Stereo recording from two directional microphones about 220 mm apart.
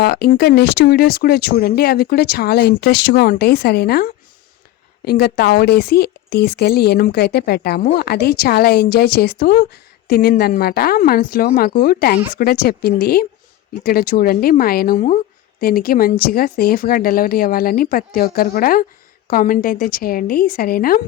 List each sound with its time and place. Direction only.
0.0 s speech: 45° left (ahead or behind)